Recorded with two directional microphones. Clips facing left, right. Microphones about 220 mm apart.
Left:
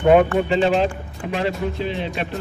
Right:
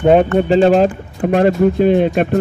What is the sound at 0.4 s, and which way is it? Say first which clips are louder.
Speech: right 7 dB; 40° right (ahead or behind).